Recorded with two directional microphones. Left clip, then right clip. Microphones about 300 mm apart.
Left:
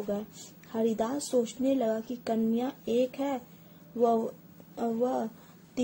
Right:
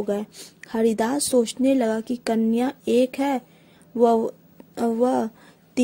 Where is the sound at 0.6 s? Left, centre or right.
Right.